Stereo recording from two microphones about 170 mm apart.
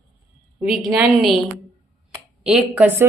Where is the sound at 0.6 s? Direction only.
5° right (ahead or behind).